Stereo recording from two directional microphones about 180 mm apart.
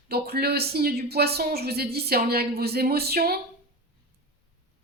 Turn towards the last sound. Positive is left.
turn(degrees=-60)  # may be behind; listen again after turning